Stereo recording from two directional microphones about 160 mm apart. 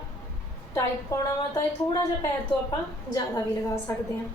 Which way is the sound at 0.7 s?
20° left (ahead or behind).